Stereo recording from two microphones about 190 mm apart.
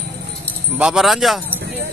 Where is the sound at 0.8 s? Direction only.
5° right (ahead or behind).